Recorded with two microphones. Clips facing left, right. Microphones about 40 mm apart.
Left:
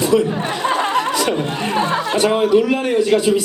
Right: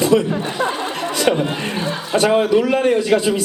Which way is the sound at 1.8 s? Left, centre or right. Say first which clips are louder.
Left 4 dB; left.